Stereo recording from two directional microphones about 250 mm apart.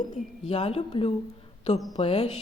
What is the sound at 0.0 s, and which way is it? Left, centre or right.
Speech, left.